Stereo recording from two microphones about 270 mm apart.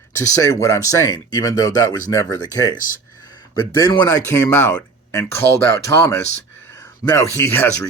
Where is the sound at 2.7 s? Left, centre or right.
Left.